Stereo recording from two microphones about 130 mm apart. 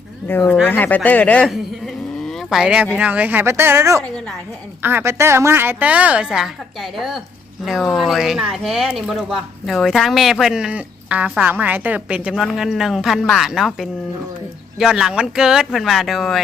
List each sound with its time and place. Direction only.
0.3 s speech: 15° left (ahead or behind)
2.1 s a sound: centre (ahead or behind)
3.0 s a woman's voice: 10° right (ahead or behind)
4.0 s speech: 5° left (ahead or behind)
4.8 s a woman's voice: 15° right (ahead or behind)